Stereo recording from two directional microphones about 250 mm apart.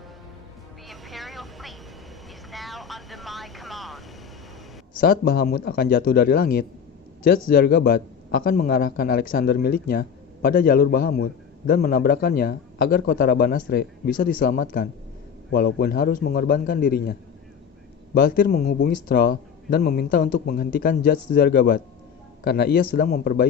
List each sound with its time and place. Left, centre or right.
0.9 s vehicle: centre
2.5 s speech: centre
4.9 s a man's voice: left